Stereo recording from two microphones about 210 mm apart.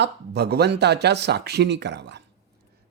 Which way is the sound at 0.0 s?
50° right (ahead or behind).